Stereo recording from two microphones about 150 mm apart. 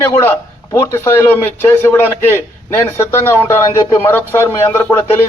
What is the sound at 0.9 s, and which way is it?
A man's voice, 15° left (ahead or behind).